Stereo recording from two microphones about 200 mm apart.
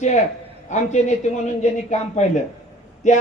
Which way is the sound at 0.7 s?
35° left (ahead or behind).